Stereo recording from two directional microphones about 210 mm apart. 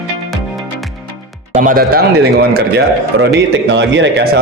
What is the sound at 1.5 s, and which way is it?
Speech, 40° right (ahead or behind).